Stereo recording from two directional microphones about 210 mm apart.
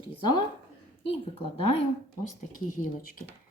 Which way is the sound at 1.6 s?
25° left (ahead or behind).